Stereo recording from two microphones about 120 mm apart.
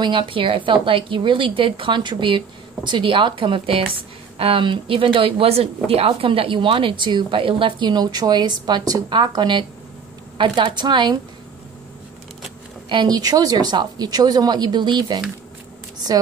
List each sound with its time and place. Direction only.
0.0 s a woman's voice: 40° right (ahead or behind)
12.8 s a woman's voice: 40° right (ahead or behind)